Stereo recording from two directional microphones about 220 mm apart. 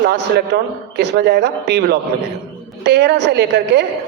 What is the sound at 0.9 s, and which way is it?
A man's voice, 50° right (ahead or behind).